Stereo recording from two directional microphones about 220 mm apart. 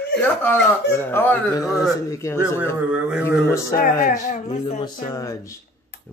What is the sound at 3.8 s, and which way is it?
Speech, 40° left (ahead or behind).